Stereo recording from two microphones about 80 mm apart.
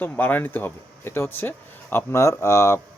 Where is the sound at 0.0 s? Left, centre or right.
Left.